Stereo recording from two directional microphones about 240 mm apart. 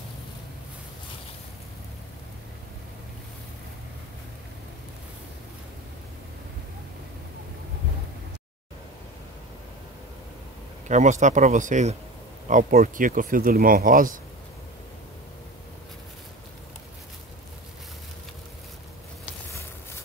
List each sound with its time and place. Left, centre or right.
10.9 s speech: right